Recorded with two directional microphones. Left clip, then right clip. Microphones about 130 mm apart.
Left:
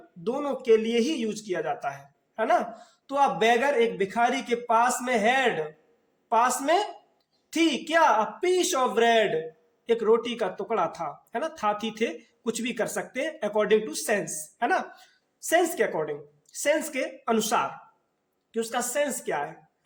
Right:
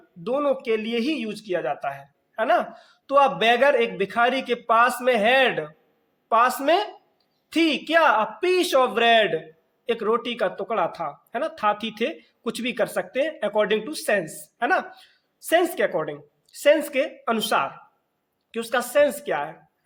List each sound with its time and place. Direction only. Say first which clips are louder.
0.3 s a man's voice: right 1 dB; 25° right (ahead or behind)
18.5 s a man's voice: right 6 dB; 35° right (ahead or behind)